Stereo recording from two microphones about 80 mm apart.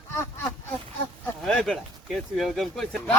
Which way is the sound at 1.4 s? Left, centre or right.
Centre.